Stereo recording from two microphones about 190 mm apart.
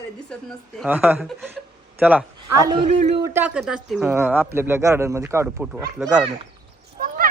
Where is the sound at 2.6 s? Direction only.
30° right (ahead or behind).